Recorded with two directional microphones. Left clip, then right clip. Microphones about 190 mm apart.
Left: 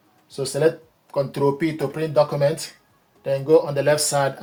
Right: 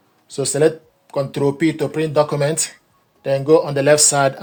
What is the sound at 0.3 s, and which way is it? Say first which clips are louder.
Speech: right 4 dB; 60° right (ahead or behind).